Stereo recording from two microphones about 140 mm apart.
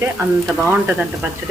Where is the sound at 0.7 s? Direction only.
10° right (ahead or behind).